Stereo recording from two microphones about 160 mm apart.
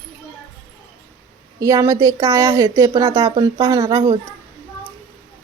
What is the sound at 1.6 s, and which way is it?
A woman's voice, 20° right (ahead or behind).